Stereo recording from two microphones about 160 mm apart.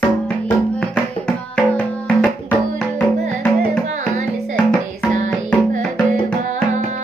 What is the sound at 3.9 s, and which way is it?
Music, 45° right (ahead or behind).